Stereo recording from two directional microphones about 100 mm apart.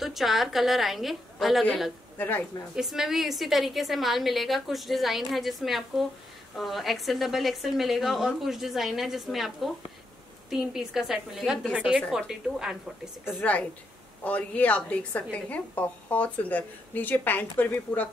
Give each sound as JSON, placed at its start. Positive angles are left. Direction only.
{"t": 0.0, "sound": "a woman's voice", "side_deg": 0}
{"t": 2.1, "sound": "speech", "side_deg": 20}
{"t": 2.7, "sound": "a woman's voice", "side_deg": -5}
{"t": 13.4, "sound": "a woman's voice", "side_deg": 15}